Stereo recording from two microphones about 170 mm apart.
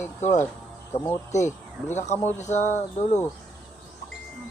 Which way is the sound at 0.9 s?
15° left (ahead or behind).